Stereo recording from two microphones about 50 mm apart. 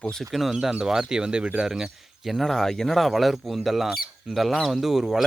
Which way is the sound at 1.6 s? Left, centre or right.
Centre.